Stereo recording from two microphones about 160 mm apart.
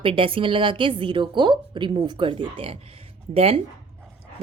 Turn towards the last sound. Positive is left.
turn(degrees=-40)  # may be behind; listen again after turning